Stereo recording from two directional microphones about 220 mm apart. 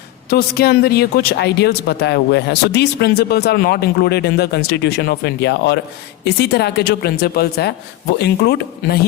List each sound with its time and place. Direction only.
0.3 s speech: 45° left (ahead or behind)